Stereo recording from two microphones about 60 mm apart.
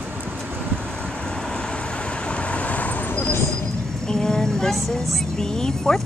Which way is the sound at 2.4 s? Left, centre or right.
Left.